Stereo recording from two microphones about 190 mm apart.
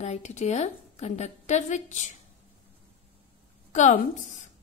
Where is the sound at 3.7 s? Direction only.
40° left (ahead or behind).